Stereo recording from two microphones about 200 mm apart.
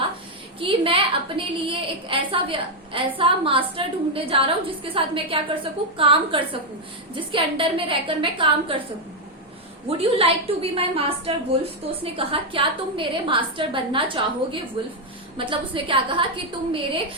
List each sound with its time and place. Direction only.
0.6 s a woman's voice: 25° right (ahead or behind)
10.0 s a woman's voice: 30° right (ahead or behind)